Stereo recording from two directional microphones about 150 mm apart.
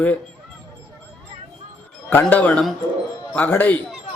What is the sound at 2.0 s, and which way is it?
Speech, 10° left (ahead or behind).